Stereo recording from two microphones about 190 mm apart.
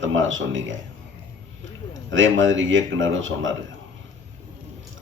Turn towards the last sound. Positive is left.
turn(degrees=-85)